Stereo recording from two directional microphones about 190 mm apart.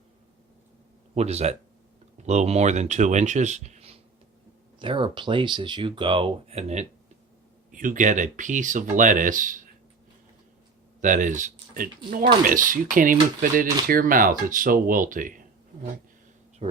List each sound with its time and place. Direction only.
1.1 s speech: 35° right (ahead or behind)
11.0 s speech: 45° right (ahead or behind)